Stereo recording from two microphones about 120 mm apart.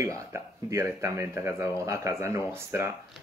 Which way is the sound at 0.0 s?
25° right (ahead or behind).